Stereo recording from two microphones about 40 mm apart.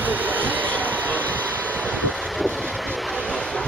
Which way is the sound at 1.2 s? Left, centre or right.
Left.